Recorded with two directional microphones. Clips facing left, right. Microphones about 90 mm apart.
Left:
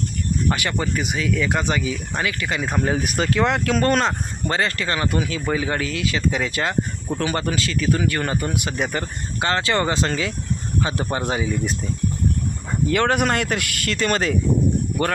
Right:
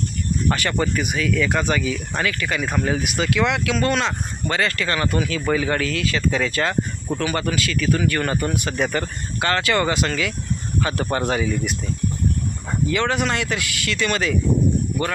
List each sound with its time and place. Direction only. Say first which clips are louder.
0.5 s speech: right 2 dB; 15° left (ahead or behind); by 4.1 s 45° left (ahead or behind)
4.4 s speech: even; 30° left (ahead or behind)
12.9 s speech: left 3 dB; 50° left (ahead or behind)